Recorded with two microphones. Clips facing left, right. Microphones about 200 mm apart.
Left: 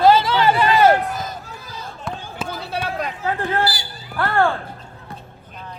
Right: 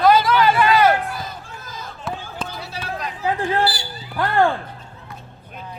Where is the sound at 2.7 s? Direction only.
55° left (ahead or behind).